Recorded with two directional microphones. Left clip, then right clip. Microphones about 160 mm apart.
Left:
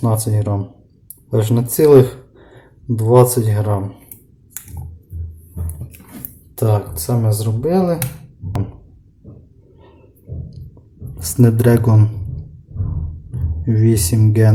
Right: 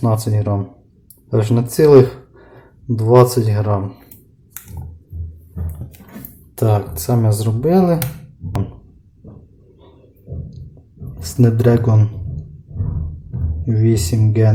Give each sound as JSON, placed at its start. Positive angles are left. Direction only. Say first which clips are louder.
{"t": 0.0, "sound": "speech", "louder": "right 1 dB", "side_deg": 0}
{"t": 6.6, "sound": "speech", "louder": "right 1 dB", "side_deg": -10}
{"t": 11.3, "sound": "speech", "louder": "left 1 dB", "side_deg": 20}
{"t": 13.7, "sound": "speech", "louder": "left 1 dB", "side_deg": 20}